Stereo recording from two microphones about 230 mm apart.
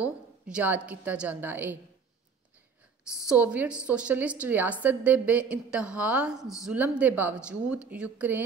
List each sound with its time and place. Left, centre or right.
0.0 s a woman's voice: centre
3.2 s a woman's voice: centre